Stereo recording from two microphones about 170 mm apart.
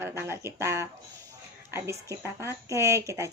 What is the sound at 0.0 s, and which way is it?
Speech, 15° right (ahead or behind).